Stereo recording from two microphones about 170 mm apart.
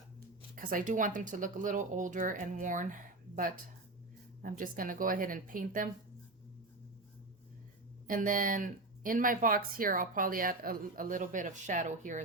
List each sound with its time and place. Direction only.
0.5 s speech: 55° right (ahead or behind)
8.0 s speech: 55° right (ahead or behind)